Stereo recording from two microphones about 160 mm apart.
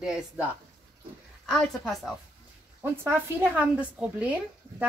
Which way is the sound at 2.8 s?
15° right (ahead or behind).